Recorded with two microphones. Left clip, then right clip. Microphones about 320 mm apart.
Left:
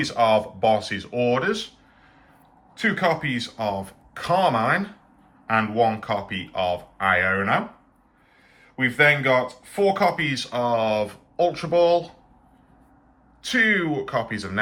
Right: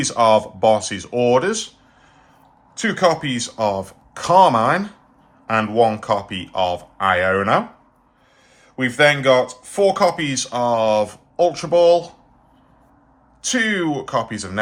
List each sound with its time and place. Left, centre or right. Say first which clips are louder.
0.0 s speech: right 5 dB; centre
2.7 s speech: right 5 dB; centre
8.7 s speech: right 3 dB; centre
13.4 s speech: right 1 dB; centre